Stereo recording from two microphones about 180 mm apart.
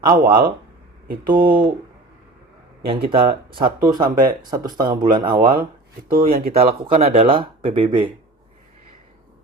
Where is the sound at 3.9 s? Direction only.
25° right (ahead or behind).